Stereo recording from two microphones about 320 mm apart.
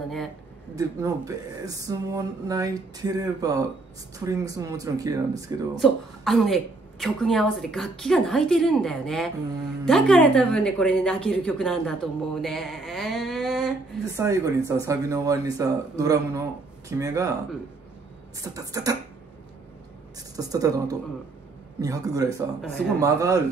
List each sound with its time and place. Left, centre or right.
0.7 s speech: centre
5.8 s speech: centre
18.4 s speech: centre
20.3 s speech: centre